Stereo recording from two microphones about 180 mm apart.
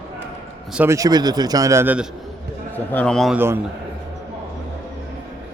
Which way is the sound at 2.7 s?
10° left (ahead or behind).